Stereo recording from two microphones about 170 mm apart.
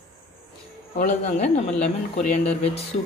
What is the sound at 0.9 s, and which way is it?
Speech, 45° left (ahead or behind).